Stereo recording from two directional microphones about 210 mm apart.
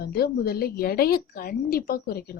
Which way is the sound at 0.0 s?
50° left (ahead or behind).